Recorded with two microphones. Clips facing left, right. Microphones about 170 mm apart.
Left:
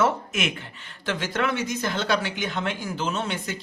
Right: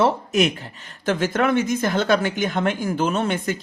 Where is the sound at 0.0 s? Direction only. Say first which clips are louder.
Right 5 dB; 40° right (ahead or behind).